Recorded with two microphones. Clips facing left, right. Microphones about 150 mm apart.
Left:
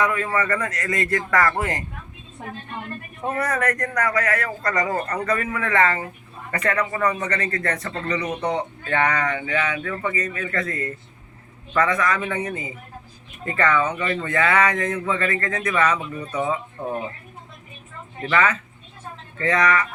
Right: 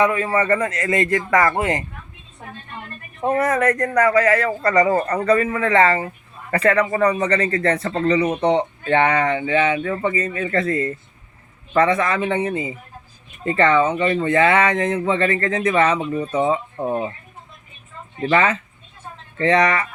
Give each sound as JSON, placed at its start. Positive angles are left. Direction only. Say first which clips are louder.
{"t": 0.0, "sound": "speech", "louder": "right 4 dB", "side_deg": -25}
{"t": 3.3, "sound": "speech", "louder": "right 6 dB", "side_deg": -25}
{"t": 18.2, "sound": "speech", "louder": "right 3 dB", "side_deg": -30}